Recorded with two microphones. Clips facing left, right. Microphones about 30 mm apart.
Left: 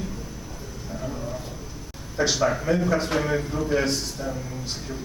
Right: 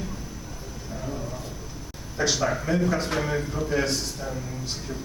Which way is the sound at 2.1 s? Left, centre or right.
Centre.